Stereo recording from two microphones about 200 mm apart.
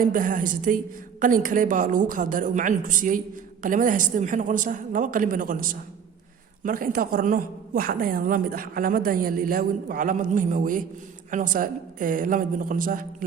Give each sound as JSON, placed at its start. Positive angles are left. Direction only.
{"t": 0.0, "sound": "a woman's voice", "side_deg": -45}